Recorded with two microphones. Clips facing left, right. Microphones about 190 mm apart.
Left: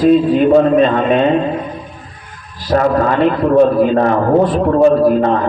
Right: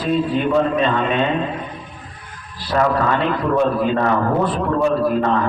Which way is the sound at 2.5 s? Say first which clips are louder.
Left 5 dB; 40° left (ahead or behind).